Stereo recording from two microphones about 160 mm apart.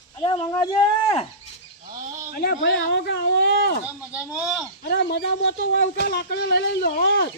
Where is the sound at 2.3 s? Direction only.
70° left (ahead or behind); by 3.8 s 90° left.